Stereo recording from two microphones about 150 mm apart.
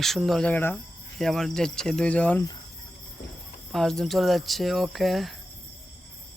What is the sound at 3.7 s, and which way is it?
Speech, 5° left (ahead or behind).